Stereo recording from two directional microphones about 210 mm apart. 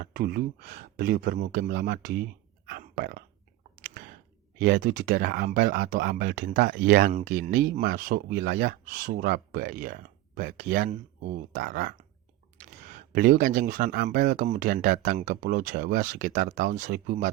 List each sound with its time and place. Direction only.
0.0 s speech: 45° right (ahead or behind)
3.8 s clicking: 40° right (ahead or behind)
4.5 s speech: 40° right (ahead or behind)